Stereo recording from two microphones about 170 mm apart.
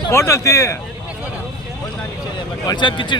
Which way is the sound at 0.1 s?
15° left (ahead or behind).